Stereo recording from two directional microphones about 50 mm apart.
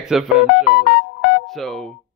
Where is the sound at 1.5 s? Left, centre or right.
Centre.